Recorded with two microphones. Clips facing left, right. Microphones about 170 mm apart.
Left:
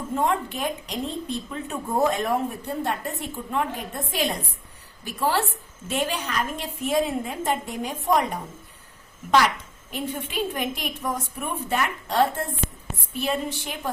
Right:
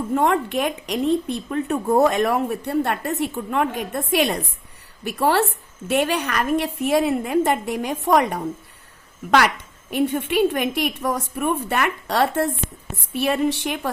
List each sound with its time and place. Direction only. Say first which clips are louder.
0.1 s a woman's voice: right 4 dB; 65° right (ahead or behind)
9.9 s a woman's voice: right 9 dB; 70° right (ahead or behind)